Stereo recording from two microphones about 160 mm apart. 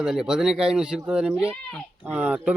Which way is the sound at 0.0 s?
5° right (ahead or behind).